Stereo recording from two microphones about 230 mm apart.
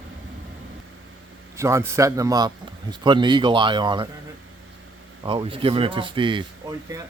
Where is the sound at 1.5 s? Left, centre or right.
Centre.